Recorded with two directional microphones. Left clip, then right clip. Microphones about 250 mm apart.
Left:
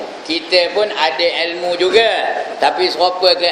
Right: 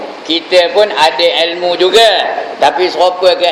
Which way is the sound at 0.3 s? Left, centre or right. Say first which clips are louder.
Right 5 dB; centre.